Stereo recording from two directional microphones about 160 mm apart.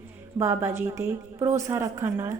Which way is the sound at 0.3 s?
15° right (ahead or behind).